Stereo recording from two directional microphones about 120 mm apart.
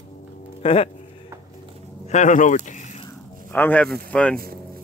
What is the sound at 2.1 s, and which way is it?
Speech, 90° left.